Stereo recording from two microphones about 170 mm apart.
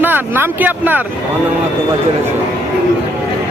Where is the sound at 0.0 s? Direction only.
10° right (ahead or behind).